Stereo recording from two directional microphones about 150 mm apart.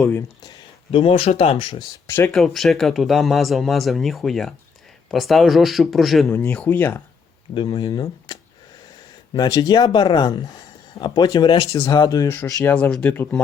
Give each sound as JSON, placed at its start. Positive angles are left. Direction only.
{"t": 0.0, "sound": "speech", "side_deg": 15}
{"t": 0.9, "sound": "speech", "side_deg": 40}
{"t": 2.0, "sound": "speech", "side_deg": 15}
{"t": 2.3, "sound": "speech", "side_deg": 0}
{"t": 6.2, "sound": "speech", "side_deg": 15}
{"t": 7.5, "sound": "speech", "side_deg": 30}